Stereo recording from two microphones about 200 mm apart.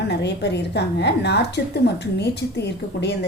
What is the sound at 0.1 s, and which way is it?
A woman's voice, 60° left (ahead or behind).